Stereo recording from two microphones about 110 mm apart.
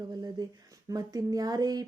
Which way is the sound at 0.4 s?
35° right (ahead or behind).